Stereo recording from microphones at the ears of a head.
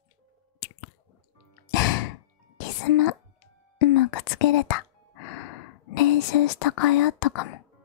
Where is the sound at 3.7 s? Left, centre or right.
Left.